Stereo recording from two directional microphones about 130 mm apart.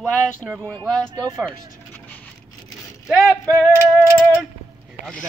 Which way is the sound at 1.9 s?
10° left (ahead or behind).